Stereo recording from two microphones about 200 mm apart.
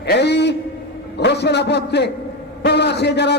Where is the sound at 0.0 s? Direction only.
55° left (ahead or behind).